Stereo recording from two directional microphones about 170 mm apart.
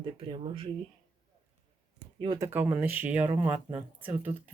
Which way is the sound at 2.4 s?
10° right (ahead or behind).